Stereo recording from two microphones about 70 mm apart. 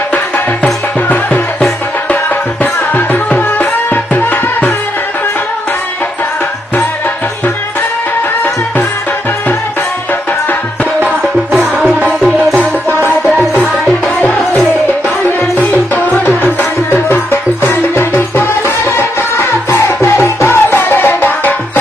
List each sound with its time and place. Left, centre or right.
1.0 s music: left
15.2 s music: left